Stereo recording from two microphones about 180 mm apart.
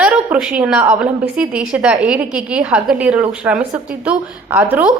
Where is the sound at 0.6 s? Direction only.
5° right (ahead or behind).